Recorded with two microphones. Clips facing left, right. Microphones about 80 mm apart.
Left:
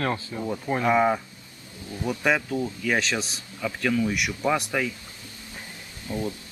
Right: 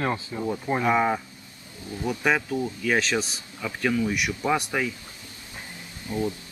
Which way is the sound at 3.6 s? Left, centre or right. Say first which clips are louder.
Even; centre.